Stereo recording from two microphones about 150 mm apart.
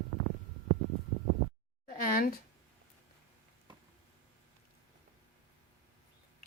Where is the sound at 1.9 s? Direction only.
70° left (ahead or behind).